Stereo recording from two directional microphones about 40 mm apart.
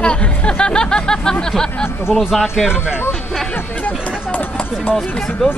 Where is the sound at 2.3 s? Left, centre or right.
Centre.